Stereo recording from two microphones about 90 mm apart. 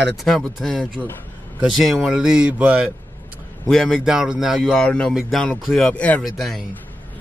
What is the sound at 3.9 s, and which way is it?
Speech, 5° right (ahead or behind).